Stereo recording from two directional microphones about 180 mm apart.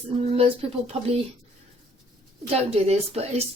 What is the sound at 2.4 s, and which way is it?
A woman's voice, 35° right (ahead or behind).